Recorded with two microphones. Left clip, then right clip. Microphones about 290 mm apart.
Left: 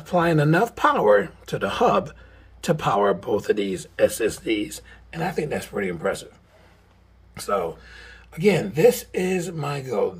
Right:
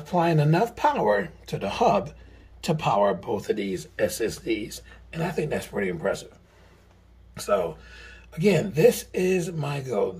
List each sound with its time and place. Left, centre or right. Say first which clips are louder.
0.0 s speech: left 3 dB; centre
7.3 s speech: even; centre